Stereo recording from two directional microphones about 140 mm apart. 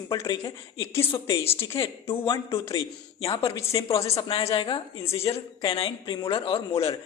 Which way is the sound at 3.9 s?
45° left (ahead or behind).